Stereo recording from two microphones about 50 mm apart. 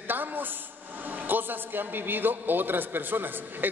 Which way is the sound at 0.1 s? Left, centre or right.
Right.